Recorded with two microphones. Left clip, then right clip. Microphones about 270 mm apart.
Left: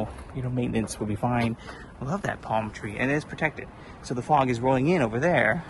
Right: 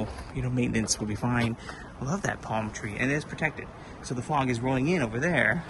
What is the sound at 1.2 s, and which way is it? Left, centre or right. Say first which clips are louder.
A man's voice: left 6 dB; centre.